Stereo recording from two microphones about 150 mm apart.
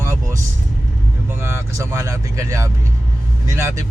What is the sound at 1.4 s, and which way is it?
Speech, 20° right (ahead or behind).